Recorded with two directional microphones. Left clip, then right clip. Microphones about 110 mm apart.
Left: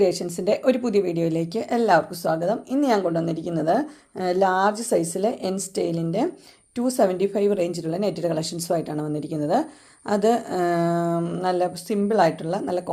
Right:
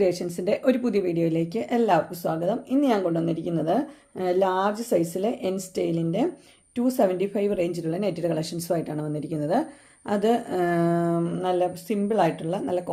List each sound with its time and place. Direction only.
0.0 s speech: 20° left (ahead or behind)